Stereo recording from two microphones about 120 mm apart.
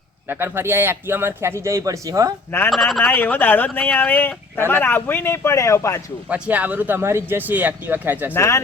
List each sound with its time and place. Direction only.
0.3 s a man's voice: 20° right (ahead or behind)
2.6 s speech: centre (ahead or behind)
3.0 s speech: 15° left (ahead or behind)
6.3 s speech: 15° right (ahead or behind)
8.3 s speech: 25° left (ahead or behind)